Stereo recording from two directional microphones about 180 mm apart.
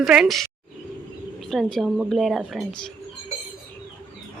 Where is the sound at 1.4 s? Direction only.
Centre (ahead or behind).